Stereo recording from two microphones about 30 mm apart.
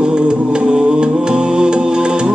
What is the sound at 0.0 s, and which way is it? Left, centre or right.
Music, right.